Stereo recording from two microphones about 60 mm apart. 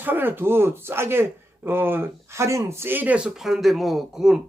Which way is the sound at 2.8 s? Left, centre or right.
Right.